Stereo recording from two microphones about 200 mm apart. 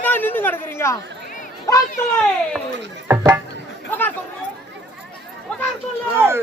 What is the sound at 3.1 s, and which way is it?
Speech, 10° right (ahead or behind).